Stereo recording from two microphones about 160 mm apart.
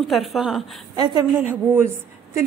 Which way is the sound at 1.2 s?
15° right (ahead or behind).